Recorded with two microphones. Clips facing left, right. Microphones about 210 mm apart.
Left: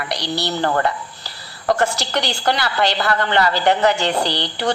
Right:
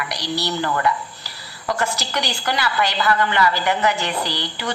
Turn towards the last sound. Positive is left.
turn(degrees=65)  # may be behind; listen again after turning